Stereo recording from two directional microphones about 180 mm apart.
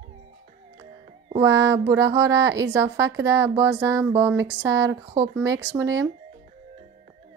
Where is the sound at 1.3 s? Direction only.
15° right (ahead or behind).